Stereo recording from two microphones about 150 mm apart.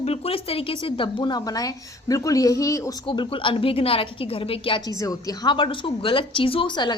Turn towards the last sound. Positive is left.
turn(degrees=30)  # may be behind; listen again after turning